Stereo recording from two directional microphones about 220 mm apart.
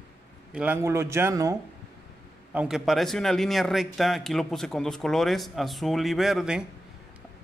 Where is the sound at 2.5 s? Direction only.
5° right (ahead or behind).